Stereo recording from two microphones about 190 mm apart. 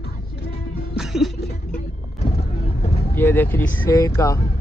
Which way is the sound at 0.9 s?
Centre (ahead or behind).